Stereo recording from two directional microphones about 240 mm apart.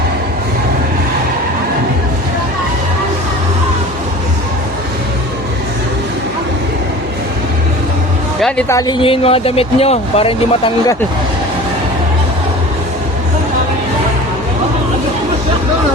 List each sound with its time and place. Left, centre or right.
8.4 s speech: centre
8.9 s speech: left